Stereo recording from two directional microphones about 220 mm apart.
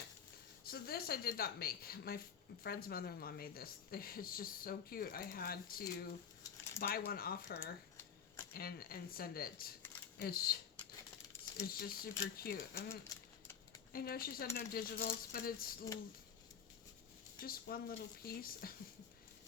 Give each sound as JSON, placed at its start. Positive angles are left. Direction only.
{"t": 0.6, "sound": "a woman's voice", "side_deg": 45}
{"t": 13.1, "sound": "a sound", "side_deg": 15}
{"t": 13.9, "sound": "a woman's voice", "side_deg": 40}
{"t": 17.4, "sound": "speech", "side_deg": 40}